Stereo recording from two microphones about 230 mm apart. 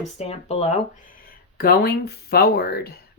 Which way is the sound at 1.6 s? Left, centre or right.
Left.